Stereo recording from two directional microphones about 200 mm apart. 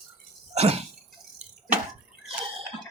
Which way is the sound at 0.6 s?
30° right (ahead or behind).